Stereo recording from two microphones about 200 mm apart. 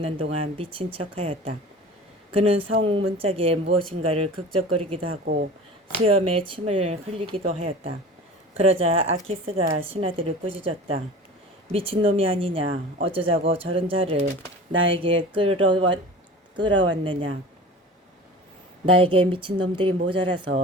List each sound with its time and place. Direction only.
0.0 s a woman's voice: 30° right (ahead or behind)
11.7 s a woman's voice: 30° right (ahead or behind)
14.7 s speech: 70° right (ahead or behind)
14.9 s a woman's voice: 25° right (ahead or behind)
18.9 s a woman's voice: 25° right (ahead or behind)